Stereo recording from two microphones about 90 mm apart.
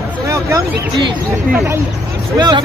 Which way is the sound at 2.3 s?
50° right (ahead or behind).